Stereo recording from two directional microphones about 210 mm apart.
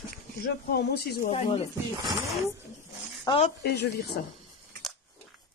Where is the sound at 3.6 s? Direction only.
50° left (ahead or behind).